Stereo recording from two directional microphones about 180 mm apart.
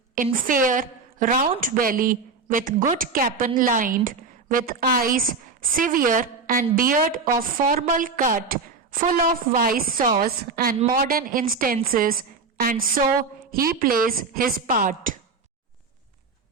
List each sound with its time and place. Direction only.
0.3 s a woman's voice: 50° right (ahead or behind)